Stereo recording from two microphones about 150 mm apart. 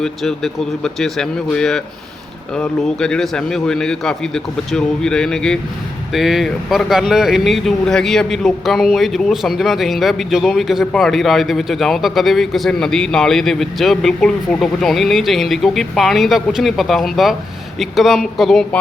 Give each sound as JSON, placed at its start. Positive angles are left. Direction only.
{"t": 0.0, "sound": "speech", "side_deg": 0}